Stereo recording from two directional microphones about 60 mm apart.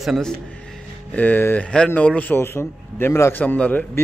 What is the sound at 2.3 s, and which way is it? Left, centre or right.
A man's voice, left.